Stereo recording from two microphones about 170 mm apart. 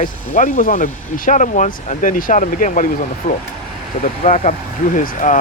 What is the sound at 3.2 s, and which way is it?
Speech, 40° left (ahead or behind).